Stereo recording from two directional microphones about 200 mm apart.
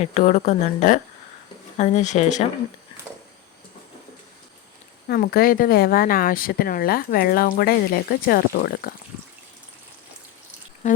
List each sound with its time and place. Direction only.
0.0 s a woman's voice: 35° left (ahead or behind)
5.0 s speech: 50° left (ahead or behind)